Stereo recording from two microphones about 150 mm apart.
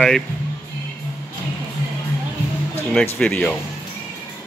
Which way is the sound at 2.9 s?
10° left (ahead or behind).